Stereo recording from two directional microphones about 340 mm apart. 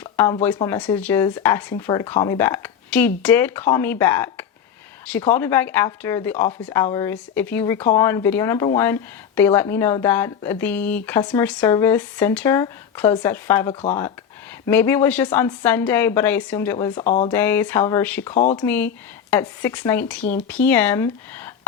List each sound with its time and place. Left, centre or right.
0.0 s a sound: centre
0.4 s speech: centre
16.9 s speech: left
17.3 s speech: centre
18.3 s speech: left
18.6 s speech: centre